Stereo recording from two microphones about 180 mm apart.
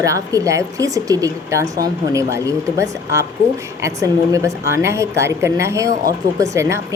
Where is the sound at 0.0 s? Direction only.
20° right (ahead or behind).